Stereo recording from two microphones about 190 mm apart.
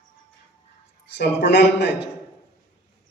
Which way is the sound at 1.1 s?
65° left (ahead or behind).